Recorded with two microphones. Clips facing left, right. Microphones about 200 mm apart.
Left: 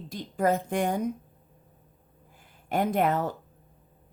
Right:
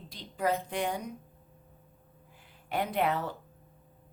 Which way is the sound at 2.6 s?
45° left (ahead or behind).